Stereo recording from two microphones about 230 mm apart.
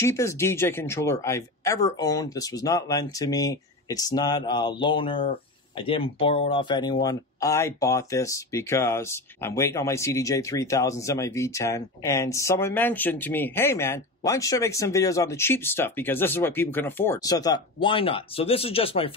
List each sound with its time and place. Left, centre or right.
0.0 s speech: centre